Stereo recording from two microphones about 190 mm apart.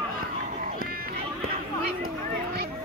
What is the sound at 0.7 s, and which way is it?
Run, 50° right (ahead or behind).